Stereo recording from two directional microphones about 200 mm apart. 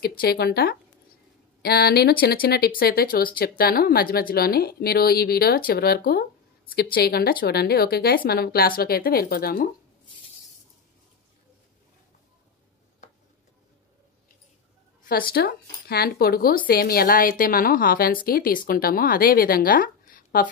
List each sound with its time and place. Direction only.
0.0 s speech: 50° left (ahead or behind)
15.0 s speech: 50° left (ahead or behind)